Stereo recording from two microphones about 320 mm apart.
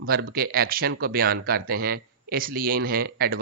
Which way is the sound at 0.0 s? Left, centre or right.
Right.